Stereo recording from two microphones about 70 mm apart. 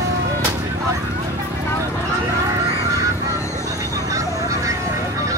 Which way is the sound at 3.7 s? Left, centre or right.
Right.